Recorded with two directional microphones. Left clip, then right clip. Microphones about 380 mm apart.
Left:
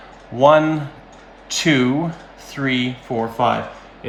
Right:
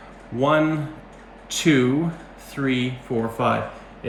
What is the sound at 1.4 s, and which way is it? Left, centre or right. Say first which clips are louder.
Speech: left 2 dB; centre.